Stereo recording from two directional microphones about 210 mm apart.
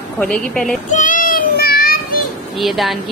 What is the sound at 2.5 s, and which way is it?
Speech, centre (ahead or behind).